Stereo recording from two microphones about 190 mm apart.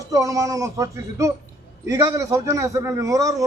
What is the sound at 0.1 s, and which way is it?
A man's voice, 15° right (ahead or behind).